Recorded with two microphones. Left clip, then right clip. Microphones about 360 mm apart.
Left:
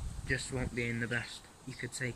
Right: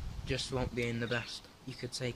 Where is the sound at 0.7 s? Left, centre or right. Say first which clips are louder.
Even; right.